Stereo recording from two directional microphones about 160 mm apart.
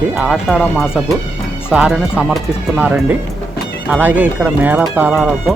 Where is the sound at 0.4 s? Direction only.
5° left (ahead or behind).